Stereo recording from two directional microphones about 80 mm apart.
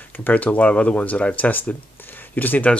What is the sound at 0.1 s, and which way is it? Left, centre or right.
Speech, left.